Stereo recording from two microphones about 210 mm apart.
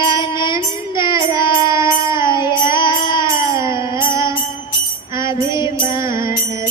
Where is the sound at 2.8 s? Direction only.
20° left (ahead or behind).